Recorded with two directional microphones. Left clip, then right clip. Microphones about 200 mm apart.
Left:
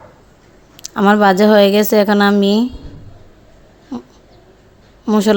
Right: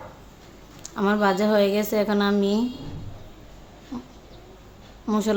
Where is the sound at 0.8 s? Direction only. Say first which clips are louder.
Left 11 dB; 45° left (ahead or behind).